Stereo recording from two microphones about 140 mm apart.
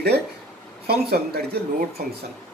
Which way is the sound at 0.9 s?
90° right.